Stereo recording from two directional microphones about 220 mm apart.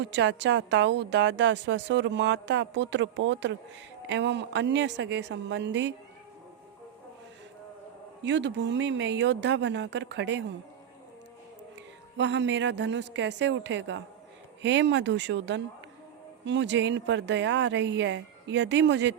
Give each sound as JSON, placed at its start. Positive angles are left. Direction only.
{"t": 0.0, "sound": "a woman's voice", "side_deg": -55}
{"t": 8.2, "sound": "a woman's voice", "side_deg": -55}
{"t": 12.1, "sound": "a woman's voice", "side_deg": -55}